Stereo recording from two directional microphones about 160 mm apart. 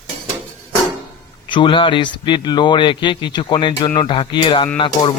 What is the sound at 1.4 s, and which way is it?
A man's voice, 30° left (ahead or behind).